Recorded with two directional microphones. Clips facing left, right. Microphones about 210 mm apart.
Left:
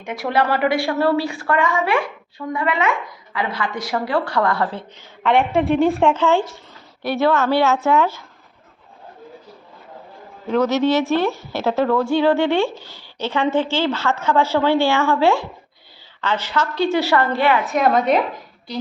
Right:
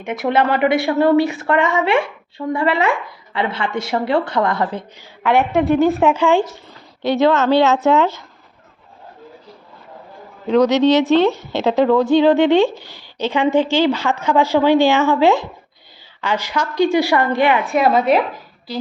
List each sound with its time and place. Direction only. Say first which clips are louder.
0.0 s a woman's voice: right 3 dB; 20° right (ahead or behind)
5.2 s a woman's voice: right 1 dB; 5° right (ahead or behind); by 8.2 s 20° right (ahead or behind)
10.4 s a woman's voice: right 4 dB; 15° right (ahead or behind)